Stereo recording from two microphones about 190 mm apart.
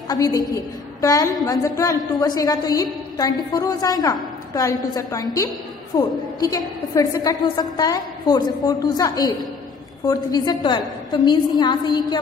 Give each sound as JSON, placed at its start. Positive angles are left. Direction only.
{"t": 0.1, "sound": "a woman's voice", "side_deg": 20}